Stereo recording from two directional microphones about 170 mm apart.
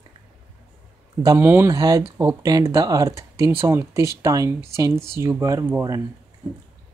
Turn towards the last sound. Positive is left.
turn(degrees=-20)  # may be behind; listen again after turning